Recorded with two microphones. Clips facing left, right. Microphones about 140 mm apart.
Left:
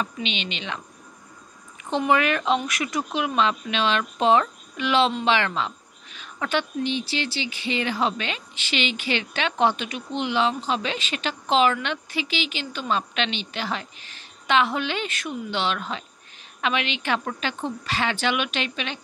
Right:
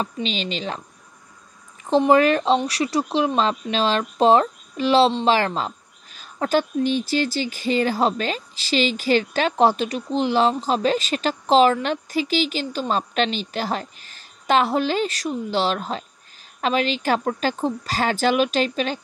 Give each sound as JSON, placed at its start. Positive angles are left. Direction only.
{"t": 0.0, "sound": "speech", "side_deg": -35}
{"t": 1.9, "sound": "speech", "side_deg": -35}